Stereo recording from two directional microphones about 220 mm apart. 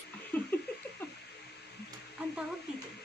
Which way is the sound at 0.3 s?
5° left (ahead or behind).